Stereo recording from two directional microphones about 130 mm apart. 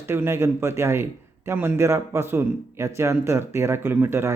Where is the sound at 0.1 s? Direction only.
20° right (ahead or behind).